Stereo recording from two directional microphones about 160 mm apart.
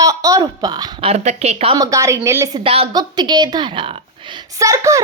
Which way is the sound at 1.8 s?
20° right (ahead or behind).